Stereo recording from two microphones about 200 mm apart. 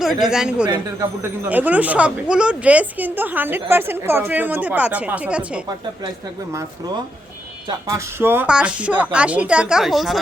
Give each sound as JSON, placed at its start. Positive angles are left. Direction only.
{"t": 0.0, "sound": "a woman's voice", "side_deg": 0}
{"t": 7.7, "sound": "a woman's voice", "side_deg": -15}